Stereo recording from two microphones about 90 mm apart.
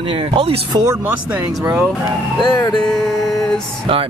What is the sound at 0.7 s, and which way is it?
Speech, 45° right (ahead or behind).